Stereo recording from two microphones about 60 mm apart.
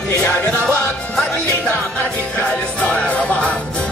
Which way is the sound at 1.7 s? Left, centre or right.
Left.